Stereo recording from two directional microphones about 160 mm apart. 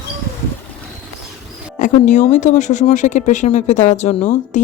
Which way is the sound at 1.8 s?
50° left (ahead or behind).